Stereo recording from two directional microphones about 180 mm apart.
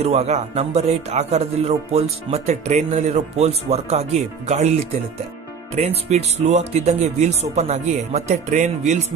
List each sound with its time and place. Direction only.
0.0 s speech: 35° right (ahead or behind)
5.8 s speech: 35° right (ahead or behind)